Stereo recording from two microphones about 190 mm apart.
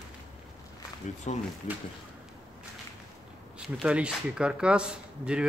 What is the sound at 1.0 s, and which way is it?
Speech, 40° left (ahead or behind).